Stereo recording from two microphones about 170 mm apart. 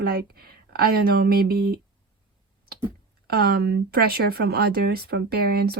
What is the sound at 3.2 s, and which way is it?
Speech, 65° right (ahead or behind).